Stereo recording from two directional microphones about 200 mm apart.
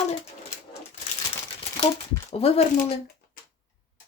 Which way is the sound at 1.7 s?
30° left (ahead or behind).